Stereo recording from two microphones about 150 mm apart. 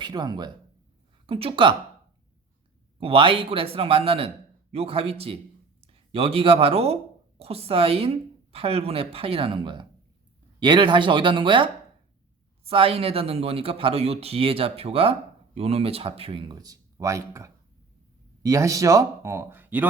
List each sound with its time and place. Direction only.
0.0 s speech: 30° right (ahead or behind)
3.0 s speech: 35° right (ahead or behind); by 19.9 s 10° right (ahead or behind)